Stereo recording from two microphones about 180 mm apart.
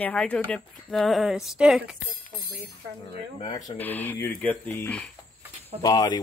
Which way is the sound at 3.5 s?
20° left (ahead or behind).